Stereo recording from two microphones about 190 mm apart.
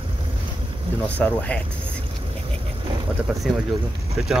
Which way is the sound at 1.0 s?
10° left (ahead or behind).